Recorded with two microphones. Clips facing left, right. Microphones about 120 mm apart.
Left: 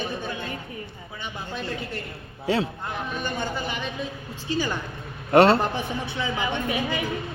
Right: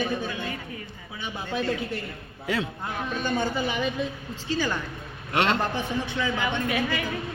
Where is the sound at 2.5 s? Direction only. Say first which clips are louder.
Left 4 dB; 30° left (ahead or behind).